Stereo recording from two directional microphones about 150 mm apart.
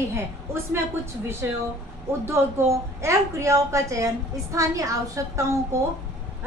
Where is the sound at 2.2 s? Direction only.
15° right (ahead or behind).